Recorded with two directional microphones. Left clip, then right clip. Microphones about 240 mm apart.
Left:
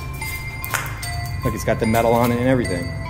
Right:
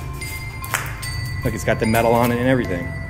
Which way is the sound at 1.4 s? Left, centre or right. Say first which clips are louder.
Even; centre.